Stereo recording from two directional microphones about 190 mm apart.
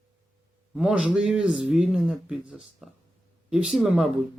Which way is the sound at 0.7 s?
5° right (ahead or behind).